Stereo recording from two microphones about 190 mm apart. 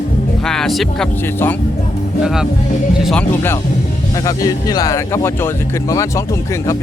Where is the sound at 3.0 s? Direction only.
5° left (ahead or behind).